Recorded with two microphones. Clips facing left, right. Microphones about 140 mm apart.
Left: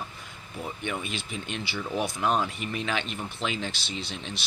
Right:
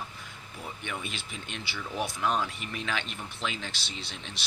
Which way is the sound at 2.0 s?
20° left (ahead or behind).